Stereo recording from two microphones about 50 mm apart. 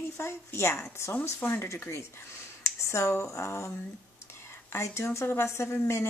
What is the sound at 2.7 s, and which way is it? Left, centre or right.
Speech, left.